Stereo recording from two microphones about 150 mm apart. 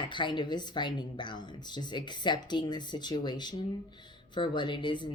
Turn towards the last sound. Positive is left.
turn(degrees=30)  # may be behind; listen again after turning